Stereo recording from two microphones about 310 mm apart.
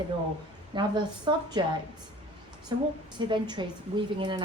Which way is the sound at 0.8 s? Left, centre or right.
Centre.